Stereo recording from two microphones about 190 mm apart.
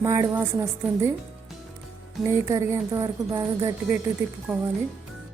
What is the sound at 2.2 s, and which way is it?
A woman's voice, 15° right (ahead or behind).